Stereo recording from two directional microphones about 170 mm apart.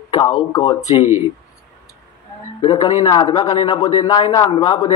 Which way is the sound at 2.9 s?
35° left (ahead or behind).